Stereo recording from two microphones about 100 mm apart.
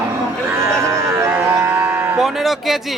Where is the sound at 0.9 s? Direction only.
30° right (ahead or behind).